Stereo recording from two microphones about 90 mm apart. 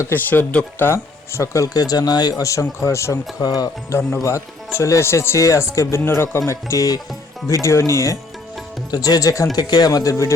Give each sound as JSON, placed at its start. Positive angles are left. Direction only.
{"t": 0.1, "sound": "speech", "side_deg": 20}
{"t": 2.4, "sound": "speech", "side_deg": 35}
{"t": 3.4, "sound": "speech", "side_deg": 45}
{"t": 3.9, "sound": "speech", "side_deg": 30}
{"t": 6.5, "sound": "speech", "side_deg": 35}
{"t": 7.4, "sound": "speech", "side_deg": 30}
{"t": 8.9, "sound": "speech", "side_deg": 45}
{"t": 9.6, "sound": "speech", "side_deg": 50}